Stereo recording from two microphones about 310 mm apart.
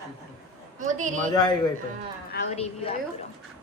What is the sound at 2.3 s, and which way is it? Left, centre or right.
Speech, centre.